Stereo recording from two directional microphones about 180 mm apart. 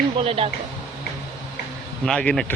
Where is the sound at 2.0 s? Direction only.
5° left (ahead or behind).